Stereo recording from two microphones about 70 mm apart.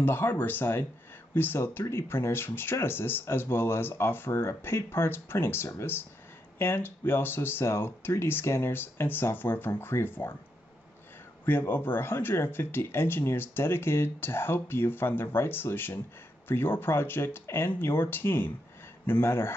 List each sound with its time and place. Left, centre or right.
0.0 s speech: left
11.4 s speech: left